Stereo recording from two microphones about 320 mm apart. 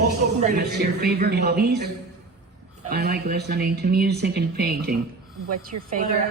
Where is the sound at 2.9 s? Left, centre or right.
Right.